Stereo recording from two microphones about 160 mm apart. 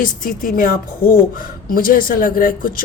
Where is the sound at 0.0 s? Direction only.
55° left (ahead or behind).